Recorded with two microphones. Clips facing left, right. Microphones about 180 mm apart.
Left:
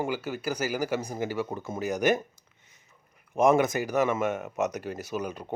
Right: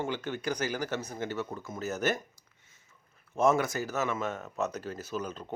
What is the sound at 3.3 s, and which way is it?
Speech, 15° left (ahead or behind).